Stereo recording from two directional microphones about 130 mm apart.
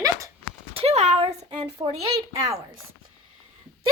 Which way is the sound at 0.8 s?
55° right (ahead or behind).